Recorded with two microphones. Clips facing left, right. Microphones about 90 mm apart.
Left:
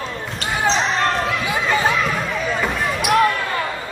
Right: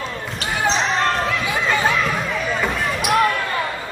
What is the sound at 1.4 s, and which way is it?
Run, 25° left (ahead or behind).